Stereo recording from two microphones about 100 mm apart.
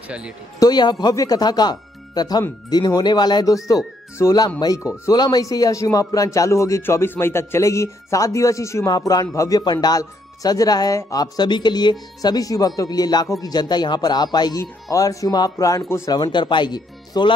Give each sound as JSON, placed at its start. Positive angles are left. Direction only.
{"t": 0.6, "sound": "a man's voice", "side_deg": 40}